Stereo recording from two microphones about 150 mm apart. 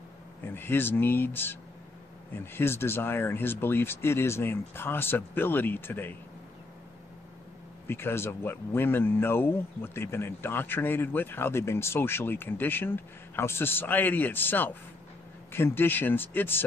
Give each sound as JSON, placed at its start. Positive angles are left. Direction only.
{"t": 0.5, "sound": "speech", "side_deg": 15}
{"t": 7.8, "sound": "speech", "side_deg": 15}